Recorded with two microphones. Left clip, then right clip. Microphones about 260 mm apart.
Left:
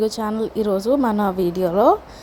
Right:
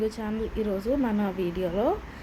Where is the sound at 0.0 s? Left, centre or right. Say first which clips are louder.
Left 8 dB; left.